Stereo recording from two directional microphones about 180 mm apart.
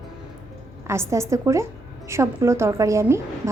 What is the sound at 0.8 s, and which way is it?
A woman's voice, 15° right (ahead or behind).